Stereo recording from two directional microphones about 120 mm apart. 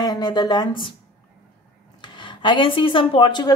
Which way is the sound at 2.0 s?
40° left (ahead or behind).